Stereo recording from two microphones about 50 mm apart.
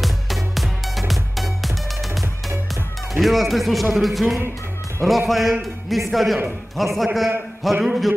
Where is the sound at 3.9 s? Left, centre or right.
Centre.